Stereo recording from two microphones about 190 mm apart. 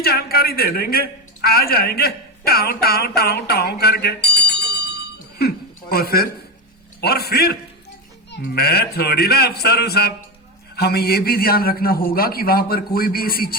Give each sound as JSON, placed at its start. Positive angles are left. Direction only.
{"t": 0.0, "sound": "a man's voice", "side_deg": 55}